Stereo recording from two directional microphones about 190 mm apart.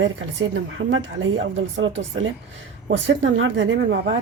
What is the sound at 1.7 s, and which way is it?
Speech, 90° right.